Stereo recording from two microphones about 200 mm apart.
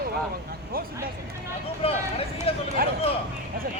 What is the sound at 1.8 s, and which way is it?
Speech, 30° left (ahead or behind).